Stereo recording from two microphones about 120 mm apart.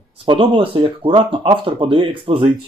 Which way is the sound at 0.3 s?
45° right (ahead or behind).